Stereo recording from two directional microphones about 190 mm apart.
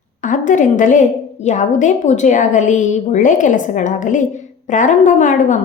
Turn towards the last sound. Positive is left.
turn(degrees=40)  # may be behind; listen again after turning